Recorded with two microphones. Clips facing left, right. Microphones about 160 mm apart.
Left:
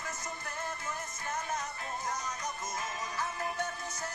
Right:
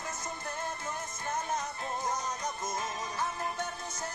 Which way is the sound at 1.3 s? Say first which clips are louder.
Right 3 dB; 20° right (ahead or behind).